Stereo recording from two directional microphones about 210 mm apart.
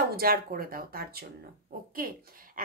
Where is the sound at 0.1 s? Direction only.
45° right (ahead or behind).